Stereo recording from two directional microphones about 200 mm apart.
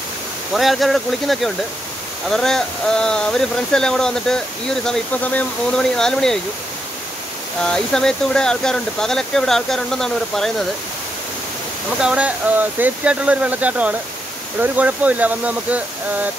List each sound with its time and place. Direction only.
0.6 s speech: centre (ahead or behind)
7.6 s speech: 5° left (ahead or behind)
12.0 s speech: 5° right (ahead or behind)